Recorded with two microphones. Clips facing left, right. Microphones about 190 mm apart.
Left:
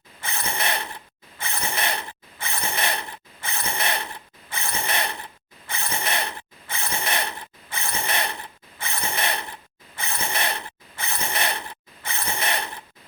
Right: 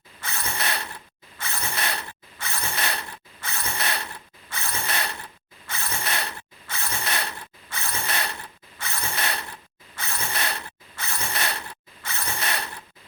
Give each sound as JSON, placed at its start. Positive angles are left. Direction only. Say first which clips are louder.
{"t": 0.2, "sound": "mechanisms", "louder": "left 2 dB", "side_deg": 15}